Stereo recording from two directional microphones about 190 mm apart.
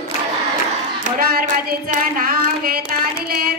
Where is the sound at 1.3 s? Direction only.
45° right (ahead or behind).